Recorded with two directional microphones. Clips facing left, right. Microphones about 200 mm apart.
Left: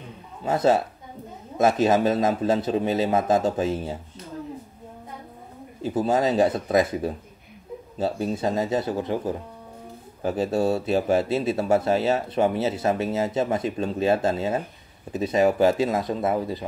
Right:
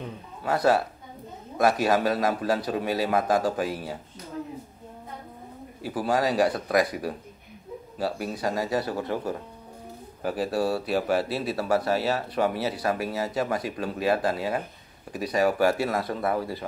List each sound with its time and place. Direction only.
0.4 s speech: 20° left (ahead or behind)
5.8 s speech: 20° left (ahead or behind)